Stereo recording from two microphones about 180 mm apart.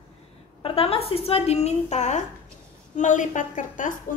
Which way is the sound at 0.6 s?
30° left (ahead or behind).